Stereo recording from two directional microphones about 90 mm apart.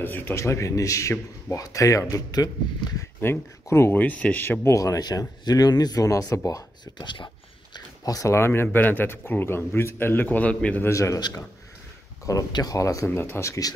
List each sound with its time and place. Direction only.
0.0 s speech: 20° left (ahead or behind)
0.4 s speech: 35° left (ahead or behind)
3.2 s speech: 25° left (ahead or behind)
4.7 s speech: 40° left (ahead or behind)
7.0 s speech: 60° left (ahead or behind)
7.7 s speech: 45° left (ahead or behind); by 10.8 s 15° left (ahead or behind)
10.8 s speech: 35° left (ahead or behind)
11.1 s speech: 50° left (ahead or behind)